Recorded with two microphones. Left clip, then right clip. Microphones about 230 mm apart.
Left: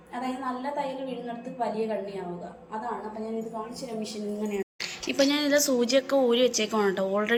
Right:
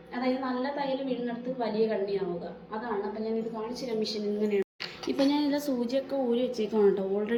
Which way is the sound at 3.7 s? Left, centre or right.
Centre.